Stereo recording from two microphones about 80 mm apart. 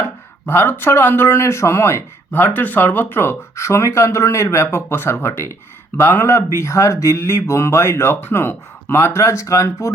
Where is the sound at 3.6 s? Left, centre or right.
Left.